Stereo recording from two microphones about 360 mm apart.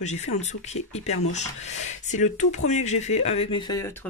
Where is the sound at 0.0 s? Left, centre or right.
Centre.